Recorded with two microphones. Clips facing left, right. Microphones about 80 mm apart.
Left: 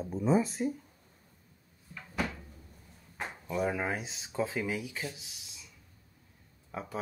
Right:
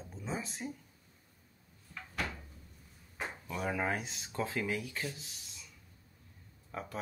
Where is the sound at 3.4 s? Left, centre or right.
Centre.